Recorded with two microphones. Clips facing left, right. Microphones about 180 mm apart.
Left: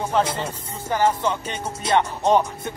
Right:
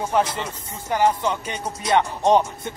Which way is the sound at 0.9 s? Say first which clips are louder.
Right 1 dB; 15° right (ahead or behind).